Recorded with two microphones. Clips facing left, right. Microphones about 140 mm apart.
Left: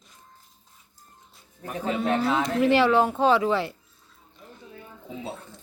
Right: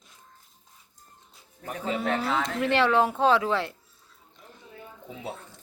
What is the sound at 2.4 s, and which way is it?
Speech, centre (ahead or behind).